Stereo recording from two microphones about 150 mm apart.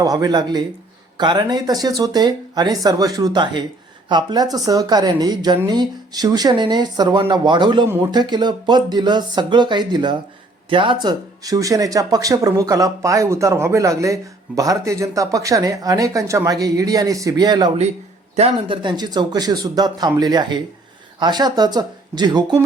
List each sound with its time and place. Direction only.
0.0 s speech: 25° right (ahead or behind)
18.3 s speech: 40° right (ahead or behind)